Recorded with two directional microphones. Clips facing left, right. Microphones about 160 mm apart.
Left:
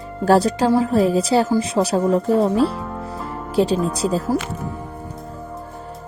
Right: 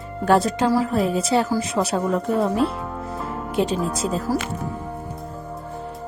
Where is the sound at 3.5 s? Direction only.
35° left (ahead or behind).